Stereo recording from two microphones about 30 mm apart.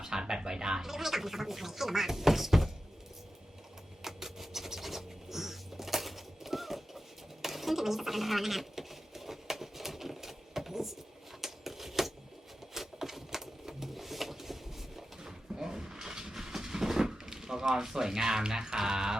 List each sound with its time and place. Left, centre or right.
0.0 s speech: centre
4.0 s music: centre
7.4 s a sound: centre
15.2 s train: centre